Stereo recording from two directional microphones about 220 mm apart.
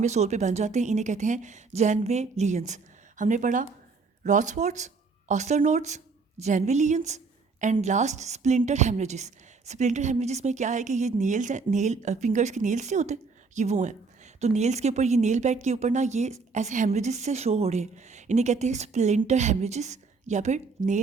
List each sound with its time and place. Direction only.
0.0 s a woman's voice: 30° right (ahead or behind)